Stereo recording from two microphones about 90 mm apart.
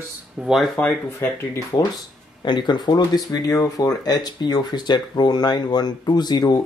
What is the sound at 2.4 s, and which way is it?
Speech, 55° left (ahead or behind).